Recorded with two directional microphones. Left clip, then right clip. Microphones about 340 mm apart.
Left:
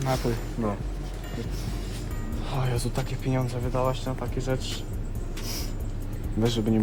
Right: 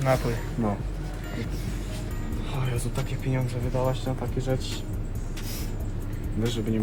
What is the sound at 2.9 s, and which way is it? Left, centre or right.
Speech, centre.